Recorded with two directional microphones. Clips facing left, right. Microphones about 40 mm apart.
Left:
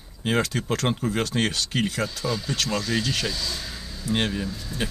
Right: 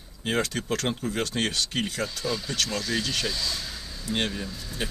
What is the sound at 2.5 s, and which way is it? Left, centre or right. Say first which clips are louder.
Speech: left 3 dB; centre.